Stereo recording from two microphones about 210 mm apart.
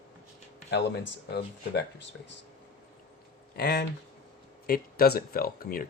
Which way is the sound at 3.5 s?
50° left (ahead or behind).